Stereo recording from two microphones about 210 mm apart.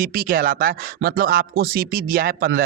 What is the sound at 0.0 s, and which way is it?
Speech, 45° right (ahead or behind).